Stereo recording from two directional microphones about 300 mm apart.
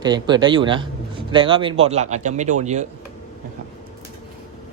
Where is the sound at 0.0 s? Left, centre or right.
Centre.